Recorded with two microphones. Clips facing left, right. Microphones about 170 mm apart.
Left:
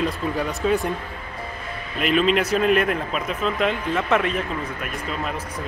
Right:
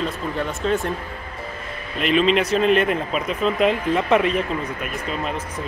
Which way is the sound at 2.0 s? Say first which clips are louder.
Right 1 dB; centre (ahead or behind).